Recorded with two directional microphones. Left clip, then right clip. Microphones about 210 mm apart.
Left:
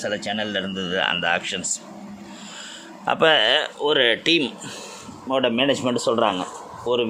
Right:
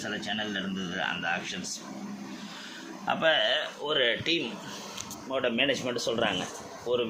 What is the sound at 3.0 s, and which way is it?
Speech, 55° left (ahead or behind).